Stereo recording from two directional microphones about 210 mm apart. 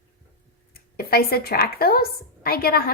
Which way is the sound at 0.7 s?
45° left (ahead or behind).